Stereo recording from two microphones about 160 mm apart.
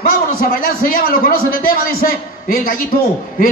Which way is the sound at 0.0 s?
65° left (ahead or behind).